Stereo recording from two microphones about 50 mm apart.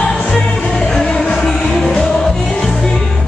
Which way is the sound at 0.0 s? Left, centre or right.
Centre.